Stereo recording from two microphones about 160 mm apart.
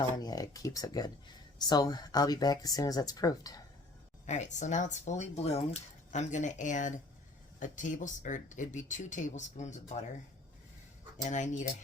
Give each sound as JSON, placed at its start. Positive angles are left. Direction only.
{"t": 0.2, "sound": "speech", "side_deg": 25}
{"t": 4.3, "sound": "speech", "side_deg": 50}
{"t": 11.2, "sound": "speech", "side_deg": 50}